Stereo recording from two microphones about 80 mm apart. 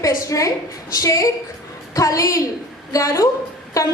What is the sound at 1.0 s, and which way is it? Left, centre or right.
A woman's voice, left.